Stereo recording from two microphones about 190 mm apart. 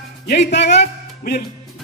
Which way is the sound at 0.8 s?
55° left (ahead or behind).